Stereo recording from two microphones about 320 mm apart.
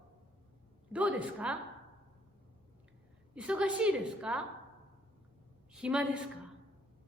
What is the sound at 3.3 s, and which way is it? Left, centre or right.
A woman's voice, centre.